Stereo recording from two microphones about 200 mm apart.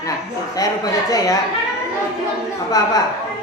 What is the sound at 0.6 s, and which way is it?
Speech, 20° left (ahead or behind).